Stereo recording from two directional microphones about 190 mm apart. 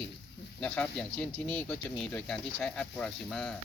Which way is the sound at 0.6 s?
5° left (ahead or behind).